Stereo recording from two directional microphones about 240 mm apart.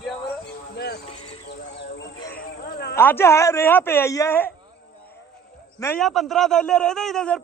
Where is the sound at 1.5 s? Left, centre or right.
Left.